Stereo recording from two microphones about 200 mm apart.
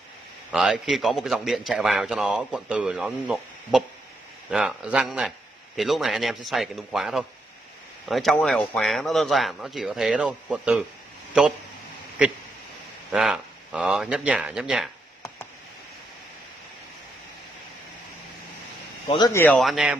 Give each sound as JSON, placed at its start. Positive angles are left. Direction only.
{"t": 0.5, "sound": "a man's voice", "side_deg": 0}
{"t": 13.1, "sound": "a man's voice", "side_deg": -5}
{"t": 19.0, "sound": "speech", "side_deg": 20}
{"t": 19.4, "sound": "a man's voice", "side_deg": 5}